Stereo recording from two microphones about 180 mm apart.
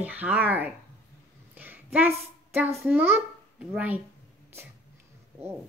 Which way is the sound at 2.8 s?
10° right (ahead or behind).